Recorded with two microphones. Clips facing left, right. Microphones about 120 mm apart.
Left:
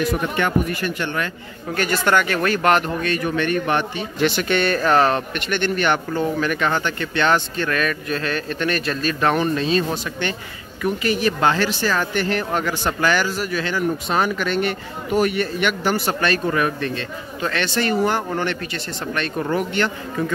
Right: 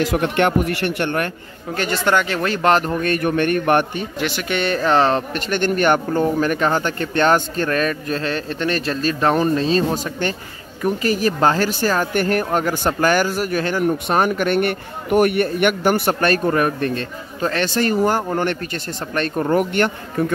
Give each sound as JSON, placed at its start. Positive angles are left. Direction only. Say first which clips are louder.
{"t": 0.0, "sound": "speech", "louder": "right 4 dB", "side_deg": -80}
{"t": 1.8, "sound": "speech", "louder": "even", "side_deg": -25}
{"t": 3.0, "sound": "speech", "louder": "right 3 dB", "side_deg": -50}
{"t": 4.2, "sound": "speech", "louder": "left 5 dB", "side_deg": -5}
{"t": 4.6, "sound": "speech", "louder": "right 1 dB", "side_deg": -20}